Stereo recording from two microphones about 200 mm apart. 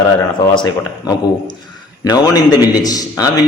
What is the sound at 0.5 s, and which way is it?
Speech, 20° left (ahead or behind).